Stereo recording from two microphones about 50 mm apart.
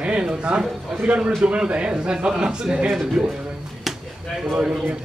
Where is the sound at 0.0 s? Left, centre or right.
Centre.